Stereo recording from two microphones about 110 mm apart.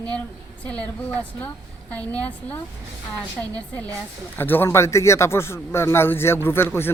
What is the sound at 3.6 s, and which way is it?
A woman's voice, 15° left (ahead or behind).